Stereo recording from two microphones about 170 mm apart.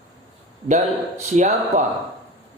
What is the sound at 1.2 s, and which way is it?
Speech, 45° right (ahead or behind).